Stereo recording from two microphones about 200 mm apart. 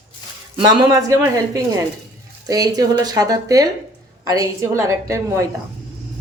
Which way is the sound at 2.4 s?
20° right (ahead or behind).